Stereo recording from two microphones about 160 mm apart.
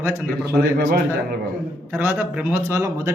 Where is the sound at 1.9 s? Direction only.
15° right (ahead or behind).